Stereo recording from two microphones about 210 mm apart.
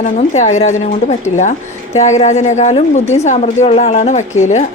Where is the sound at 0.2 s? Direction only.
35° left (ahead or behind).